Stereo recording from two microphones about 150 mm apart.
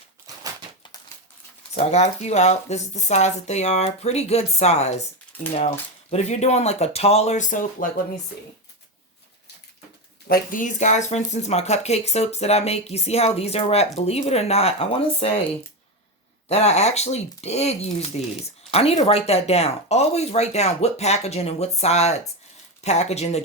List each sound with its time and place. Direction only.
1.7 s speech: 50° left (ahead or behind)
6.1 s speech: 50° left (ahead or behind)
10.2 s speech: 75° left (ahead or behind); by 15.3 s 40° left (ahead or behind)
16.5 s speech: 45° left (ahead or behind)